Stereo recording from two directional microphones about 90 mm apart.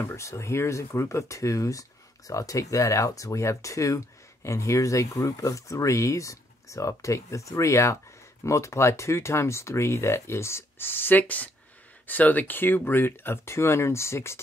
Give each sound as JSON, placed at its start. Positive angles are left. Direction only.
{"t": 0.0, "sound": "speech", "side_deg": 35}